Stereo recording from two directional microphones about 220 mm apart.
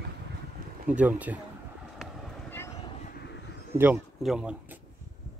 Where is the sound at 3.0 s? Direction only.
45° left (ahead or behind).